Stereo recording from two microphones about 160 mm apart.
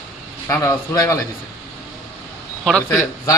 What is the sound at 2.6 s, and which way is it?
Speech, 5° left (ahead or behind).